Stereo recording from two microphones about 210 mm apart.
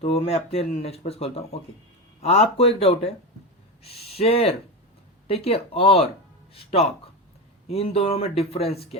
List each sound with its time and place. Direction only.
0.0 s speech: 30° left (ahead or behind)